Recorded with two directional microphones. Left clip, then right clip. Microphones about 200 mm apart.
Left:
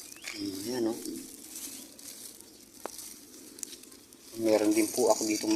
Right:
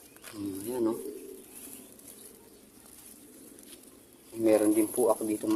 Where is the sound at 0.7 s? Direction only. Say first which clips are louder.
Right 2 dB; centre (ahead or behind).